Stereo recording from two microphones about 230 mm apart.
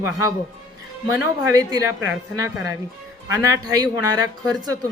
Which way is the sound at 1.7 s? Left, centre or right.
Centre.